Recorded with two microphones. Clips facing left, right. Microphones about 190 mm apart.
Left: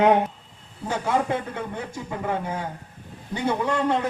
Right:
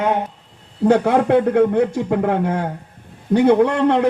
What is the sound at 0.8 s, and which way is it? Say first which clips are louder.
A man's voice: right 10 dB; 65° right (ahead or behind).